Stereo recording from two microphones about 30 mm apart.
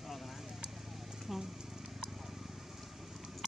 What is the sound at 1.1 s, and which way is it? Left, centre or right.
Horse, centre.